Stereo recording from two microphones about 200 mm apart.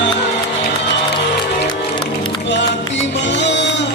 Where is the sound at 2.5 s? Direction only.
60° left (ahead or behind).